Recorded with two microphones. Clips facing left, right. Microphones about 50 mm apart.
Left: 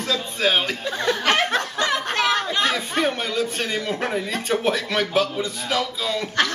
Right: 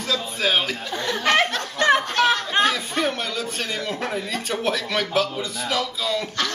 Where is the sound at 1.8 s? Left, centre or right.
Right.